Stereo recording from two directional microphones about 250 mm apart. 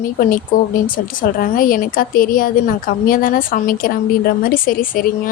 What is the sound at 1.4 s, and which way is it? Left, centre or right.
A woman's voice, left.